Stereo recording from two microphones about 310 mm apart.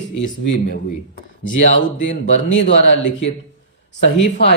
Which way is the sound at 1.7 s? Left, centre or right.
Left.